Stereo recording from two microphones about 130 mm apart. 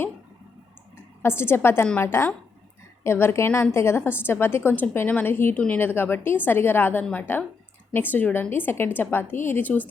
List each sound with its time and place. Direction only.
1.2 s a woman's voice: 20° left (ahead or behind)